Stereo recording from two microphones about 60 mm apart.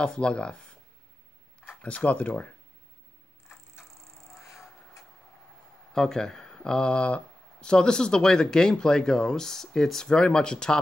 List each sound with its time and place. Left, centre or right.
0.0 s speech: centre
1.7 s speech: left
4.3 s a sound: centre
5.9 s speech: centre